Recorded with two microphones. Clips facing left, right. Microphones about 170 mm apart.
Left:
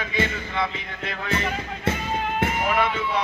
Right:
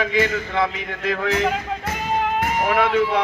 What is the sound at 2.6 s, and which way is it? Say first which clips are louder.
Speech: right 5 dB; 75° right (ahead or behind).